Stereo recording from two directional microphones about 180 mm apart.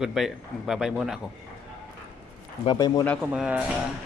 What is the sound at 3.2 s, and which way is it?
Speech, 5° right (ahead or behind).